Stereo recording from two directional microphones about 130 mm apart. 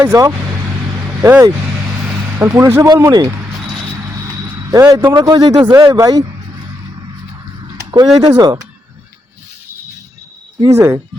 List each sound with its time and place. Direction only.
0.0 s speech: 25° right (ahead or behind)
4.7 s speech: 30° right (ahead or behind)
7.9 s speech: 30° right (ahead or behind)
10.7 s speech: 25° right (ahead or behind)